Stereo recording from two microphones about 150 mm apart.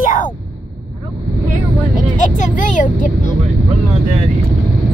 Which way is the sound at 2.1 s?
55° left (ahead or behind).